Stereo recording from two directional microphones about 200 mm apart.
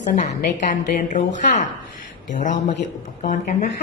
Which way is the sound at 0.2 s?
35° left (ahead or behind).